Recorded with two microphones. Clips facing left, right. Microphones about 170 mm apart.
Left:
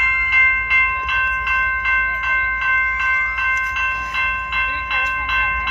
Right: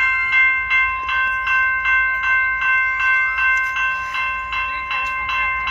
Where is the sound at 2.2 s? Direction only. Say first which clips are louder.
Right 1 dB; 30° left (ahead or behind).